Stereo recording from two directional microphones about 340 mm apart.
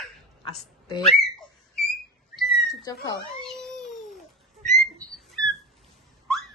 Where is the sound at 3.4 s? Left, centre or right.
Centre.